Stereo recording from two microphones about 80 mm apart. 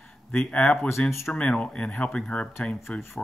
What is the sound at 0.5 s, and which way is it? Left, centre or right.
Speech, centre.